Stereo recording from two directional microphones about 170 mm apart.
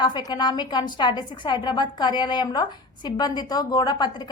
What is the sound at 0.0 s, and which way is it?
A woman's voice, 25° left (ahead or behind).